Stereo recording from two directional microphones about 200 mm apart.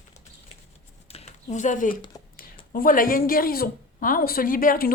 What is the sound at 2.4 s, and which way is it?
A woman's voice, 45° left (ahead or behind).